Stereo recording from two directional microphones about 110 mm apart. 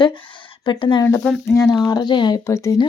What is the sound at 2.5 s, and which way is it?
Speech, 25° left (ahead or behind).